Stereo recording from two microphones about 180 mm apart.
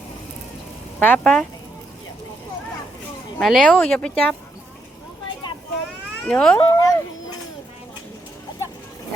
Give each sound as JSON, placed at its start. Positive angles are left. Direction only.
{"t": 0.9, "sound": "speech", "side_deg": 10}
{"t": 3.3, "sound": "speech", "side_deg": 5}
{"t": 6.2, "sound": "speech", "side_deg": 5}
{"t": 6.6, "sound": "speech", "side_deg": 20}